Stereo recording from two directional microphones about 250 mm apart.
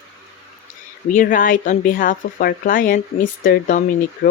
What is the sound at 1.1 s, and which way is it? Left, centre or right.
Speech, left.